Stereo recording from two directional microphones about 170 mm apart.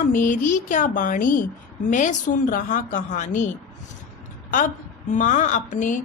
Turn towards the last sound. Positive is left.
turn(degrees=45)  # may be behind; listen again after turning